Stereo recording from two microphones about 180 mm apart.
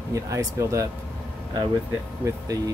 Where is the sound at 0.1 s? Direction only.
15° right (ahead or behind).